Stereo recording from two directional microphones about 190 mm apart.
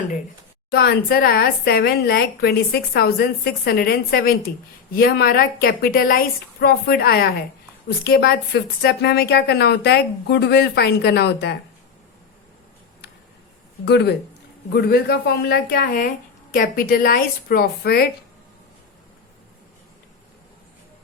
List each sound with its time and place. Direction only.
0.7 s a woman's voice: 55° left (ahead or behind)
13.8 s a woman's voice: 60° left (ahead or behind)